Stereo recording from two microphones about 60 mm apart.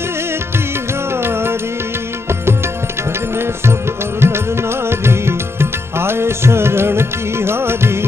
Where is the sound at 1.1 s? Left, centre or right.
Right.